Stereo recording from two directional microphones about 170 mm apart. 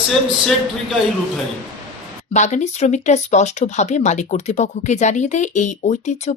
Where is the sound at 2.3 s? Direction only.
45° left (ahead or behind).